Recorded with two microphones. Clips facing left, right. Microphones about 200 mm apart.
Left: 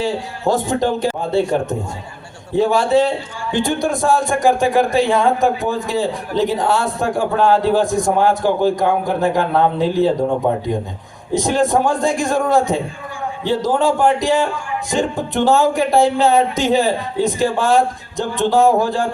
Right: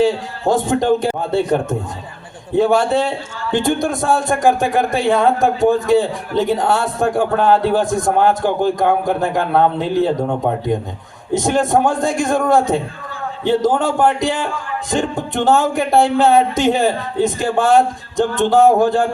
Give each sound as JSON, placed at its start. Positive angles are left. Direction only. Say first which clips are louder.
{"t": 0.0, "sound": "speech", "louder": "right 4 dB", "side_deg": -50}
{"t": 2.6, "sound": "speech", "louder": "even", "side_deg": -50}
{"t": 11.3, "sound": "speech", "louder": "even", "side_deg": -50}